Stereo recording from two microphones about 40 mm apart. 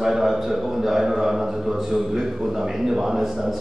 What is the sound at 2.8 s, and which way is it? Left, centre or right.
Speech, centre.